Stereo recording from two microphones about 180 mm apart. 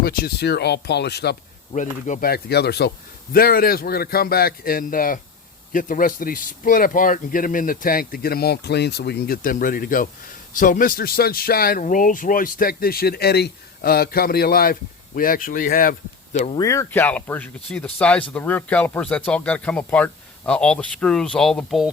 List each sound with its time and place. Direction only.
0.0 s a man's voice: 60° left (ahead or behind)
1.7 s a man's voice: 45° left (ahead or behind)
16.6 s speech: 15° left (ahead or behind)